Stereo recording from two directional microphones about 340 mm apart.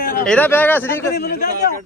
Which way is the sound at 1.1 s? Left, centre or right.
Left.